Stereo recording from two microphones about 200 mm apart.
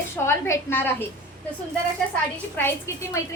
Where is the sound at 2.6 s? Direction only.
10° left (ahead or behind).